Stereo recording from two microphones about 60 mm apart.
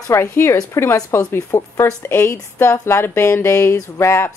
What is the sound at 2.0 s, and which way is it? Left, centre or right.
A woman's voice, left.